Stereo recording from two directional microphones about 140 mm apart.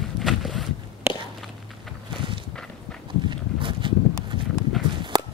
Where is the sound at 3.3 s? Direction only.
35° right (ahead or behind).